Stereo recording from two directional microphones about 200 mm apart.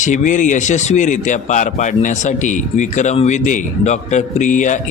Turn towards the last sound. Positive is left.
turn(degrees=40)  # may be behind; listen again after turning